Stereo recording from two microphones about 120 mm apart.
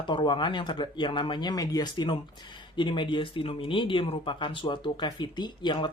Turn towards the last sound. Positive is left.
turn(degrees=40)  # may be behind; listen again after turning